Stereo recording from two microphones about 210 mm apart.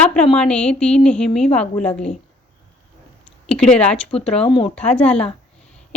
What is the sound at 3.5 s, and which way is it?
Speech, 5° left (ahead or behind).